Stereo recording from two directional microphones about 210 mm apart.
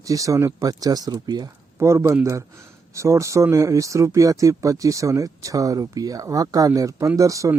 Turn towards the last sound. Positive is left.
turn(degrees=-15)  # may be behind; listen again after turning